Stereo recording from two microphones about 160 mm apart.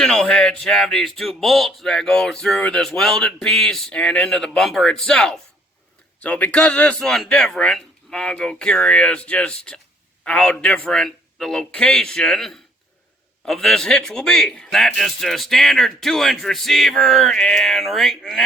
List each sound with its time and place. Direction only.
0.0 s a man's voice: 5° left (ahead or behind)